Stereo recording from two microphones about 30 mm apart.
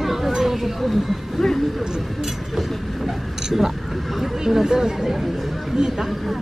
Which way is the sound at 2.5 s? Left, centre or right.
Centre.